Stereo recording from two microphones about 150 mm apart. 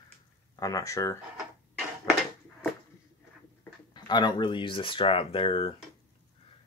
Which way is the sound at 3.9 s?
30° left (ahead or behind).